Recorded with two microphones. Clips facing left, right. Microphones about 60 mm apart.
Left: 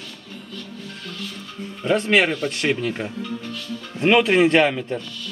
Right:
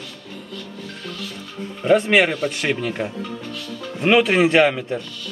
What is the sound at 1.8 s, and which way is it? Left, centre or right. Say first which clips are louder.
Speech: right 5 dB; centre.